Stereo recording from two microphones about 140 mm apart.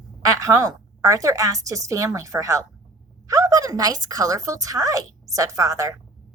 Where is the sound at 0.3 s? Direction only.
25° right (ahead or behind).